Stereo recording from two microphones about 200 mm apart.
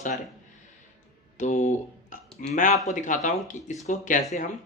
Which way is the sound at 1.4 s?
40° left (ahead or behind).